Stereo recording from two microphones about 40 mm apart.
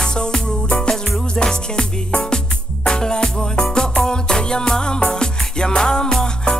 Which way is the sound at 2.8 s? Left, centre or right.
Centre.